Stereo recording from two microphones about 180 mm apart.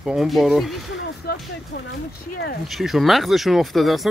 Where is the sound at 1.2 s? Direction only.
60° left (ahead or behind).